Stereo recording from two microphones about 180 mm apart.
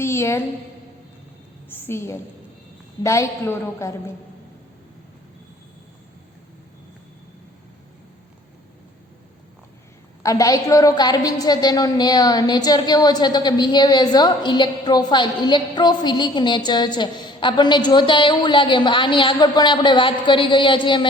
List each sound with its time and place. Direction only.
0.0 s a woman's voice: 15° left (ahead or behind)
1.7 s a sound: 15° left (ahead or behind)
3.0 s a woman's voice: 15° left (ahead or behind)
10.2 s a woman's voice: 20° left (ahead or behind)